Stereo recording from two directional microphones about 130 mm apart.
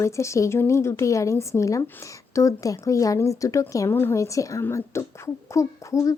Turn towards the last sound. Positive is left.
turn(degrees=25)  # may be behind; listen again after turning